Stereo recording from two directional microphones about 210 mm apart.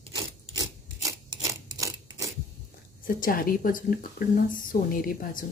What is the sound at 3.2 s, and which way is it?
A woman's voice, 45° left (ahead or behind).